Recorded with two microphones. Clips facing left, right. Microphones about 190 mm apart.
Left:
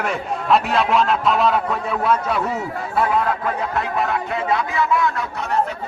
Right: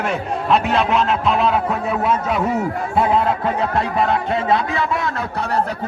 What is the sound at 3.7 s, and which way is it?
Speech, 25° right (ahead or behind).